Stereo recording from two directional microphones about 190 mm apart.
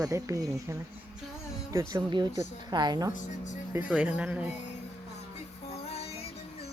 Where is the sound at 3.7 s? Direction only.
10° right (ahead or behind).